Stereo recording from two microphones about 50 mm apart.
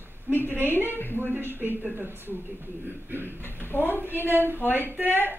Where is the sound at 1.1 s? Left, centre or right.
Right.